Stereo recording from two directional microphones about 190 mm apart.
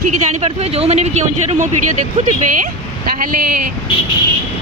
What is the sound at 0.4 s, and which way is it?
Speech, 35° right (ahead or behind).